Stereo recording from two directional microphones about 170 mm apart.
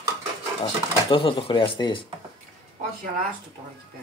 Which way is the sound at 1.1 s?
30° left (ahead or behind).